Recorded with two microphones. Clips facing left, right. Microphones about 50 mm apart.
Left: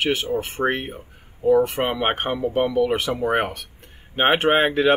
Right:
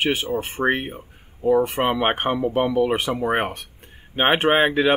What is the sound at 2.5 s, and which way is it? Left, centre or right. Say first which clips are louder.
Speech: left 2 dB; centre.